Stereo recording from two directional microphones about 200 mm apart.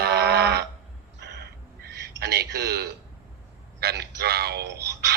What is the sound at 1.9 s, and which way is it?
A man's voice, 55° right (ahead or behind).